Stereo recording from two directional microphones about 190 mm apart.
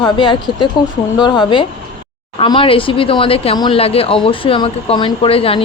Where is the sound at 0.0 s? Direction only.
25° left (ahead or behind).